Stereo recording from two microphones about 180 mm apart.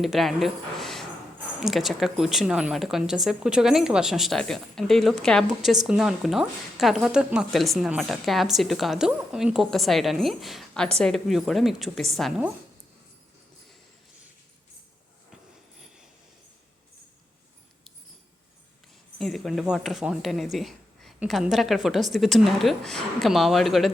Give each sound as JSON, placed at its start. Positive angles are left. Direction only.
{"t": 0.0, "sound": "speech", "side_deg": 0}
{"t": 19.2, "sound": "speech", "side_deg": 0}